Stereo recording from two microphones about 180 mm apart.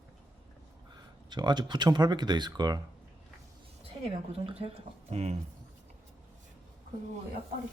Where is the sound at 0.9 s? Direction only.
25° right (ahead or behind).